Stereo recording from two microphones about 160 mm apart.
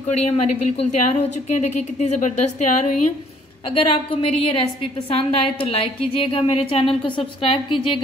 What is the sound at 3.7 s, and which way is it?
A woman's voice, 35° left (ahead or behind).